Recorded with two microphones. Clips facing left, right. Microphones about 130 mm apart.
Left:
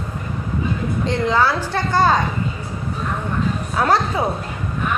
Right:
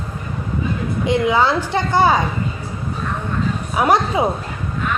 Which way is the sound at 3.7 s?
15° right (ahead or behind).